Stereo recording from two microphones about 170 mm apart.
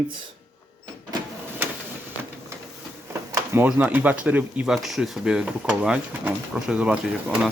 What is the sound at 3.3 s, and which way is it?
Speech, 15° right (ahead or behind).